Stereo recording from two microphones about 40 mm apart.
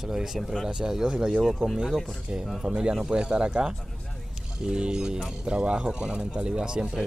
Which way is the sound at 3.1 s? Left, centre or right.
Right.